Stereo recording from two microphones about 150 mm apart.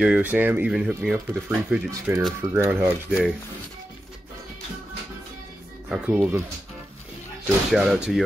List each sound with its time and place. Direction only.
0.0 s speech: 10° right (ahead or behind)
5.9 s speech: 10° right (ahead or behind)
7.7 s speech: centre (ahead or behind)